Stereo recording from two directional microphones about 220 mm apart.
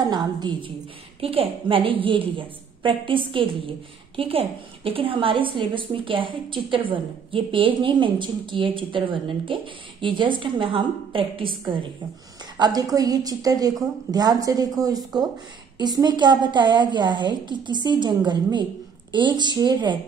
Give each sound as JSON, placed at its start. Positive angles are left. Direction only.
{"t": 0.0, "sound": "a woman's voice", "side_deg": -20}